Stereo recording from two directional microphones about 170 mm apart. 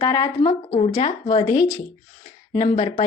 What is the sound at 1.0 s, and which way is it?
Speech, 40° left (ahead or behind).